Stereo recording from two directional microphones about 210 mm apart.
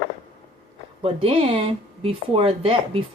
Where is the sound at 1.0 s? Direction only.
25° right (ahead or behind).